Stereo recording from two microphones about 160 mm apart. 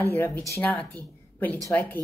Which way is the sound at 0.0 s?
15° left (ahead or behind).